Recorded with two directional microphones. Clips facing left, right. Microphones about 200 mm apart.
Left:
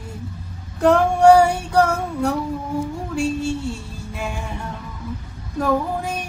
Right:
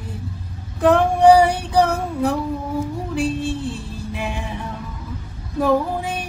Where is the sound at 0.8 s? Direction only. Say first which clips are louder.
Even; centre (ahead or behind).